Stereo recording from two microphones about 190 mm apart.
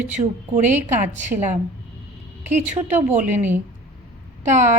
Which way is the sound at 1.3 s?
40° right (ahead or behind).